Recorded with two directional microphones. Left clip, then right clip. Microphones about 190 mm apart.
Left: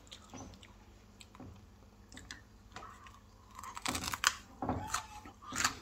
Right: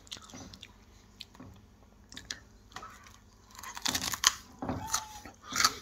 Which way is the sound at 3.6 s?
15° right (ahead or behind).